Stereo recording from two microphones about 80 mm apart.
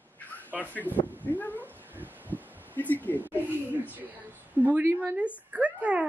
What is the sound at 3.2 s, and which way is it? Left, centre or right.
A woman's voice, right.